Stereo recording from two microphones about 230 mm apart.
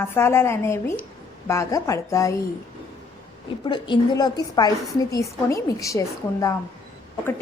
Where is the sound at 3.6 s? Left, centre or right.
Left.